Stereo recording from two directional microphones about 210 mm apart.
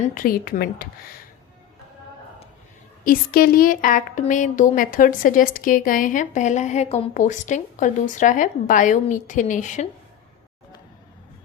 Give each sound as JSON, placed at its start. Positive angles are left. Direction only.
{"t": 0.0, "sound": "speech", "side_deg": 40}
{"t": 3.0, "sound": "a woman's voice", "side_deg": 45}